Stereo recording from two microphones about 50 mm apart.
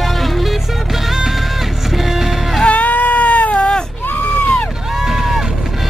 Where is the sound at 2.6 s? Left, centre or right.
Left.